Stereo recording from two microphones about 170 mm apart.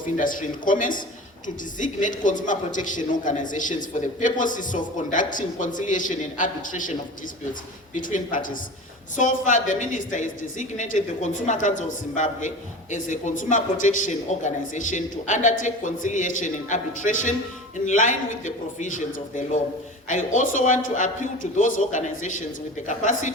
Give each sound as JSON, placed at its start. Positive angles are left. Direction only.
{"t": 0.2, "sound": "a woman's voice", "side_deg": 50}
{"t": 7.9, "sound": "a woman's voice", "side_deg": 50}